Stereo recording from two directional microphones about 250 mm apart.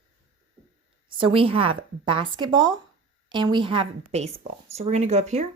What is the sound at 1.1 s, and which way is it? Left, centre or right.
Speech, right.